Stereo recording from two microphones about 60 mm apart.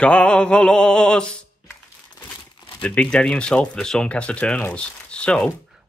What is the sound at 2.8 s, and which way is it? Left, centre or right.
Speech, left.